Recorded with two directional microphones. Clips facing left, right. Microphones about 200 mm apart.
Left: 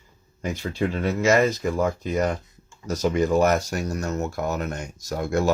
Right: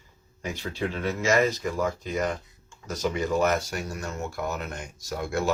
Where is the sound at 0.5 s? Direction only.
40° left (ahead or behind).